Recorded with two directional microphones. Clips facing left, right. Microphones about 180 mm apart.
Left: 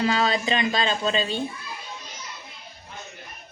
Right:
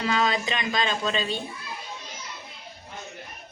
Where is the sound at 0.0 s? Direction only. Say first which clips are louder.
Left 2 dB; 30° left (ahead or behind).